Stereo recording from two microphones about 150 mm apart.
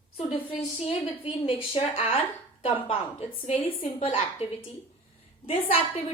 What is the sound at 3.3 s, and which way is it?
Speech, 60° left (ahead or behind).